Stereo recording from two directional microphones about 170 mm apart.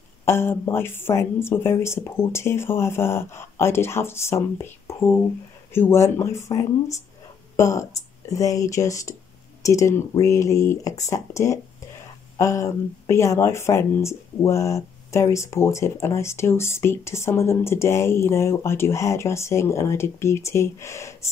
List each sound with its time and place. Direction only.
0.2 s speech: 15° left (ahead or behind)